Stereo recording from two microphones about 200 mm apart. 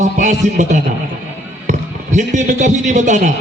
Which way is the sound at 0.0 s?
35° right (ahead or behind).